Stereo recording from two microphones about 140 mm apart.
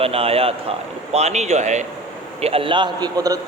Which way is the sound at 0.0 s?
45° right (ahead or behind).